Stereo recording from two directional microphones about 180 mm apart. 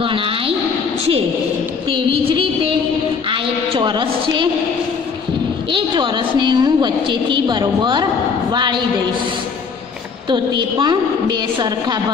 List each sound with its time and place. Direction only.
0.0 s a woman's voice: 30° right (ahead or behind)
2.2 s a woman's voice: 30° right (ahead or behind)
5.7 s a woman's voice: 25° right (ahead or behind)
10.3 s a woman's voice: 25° right (ahead or behind)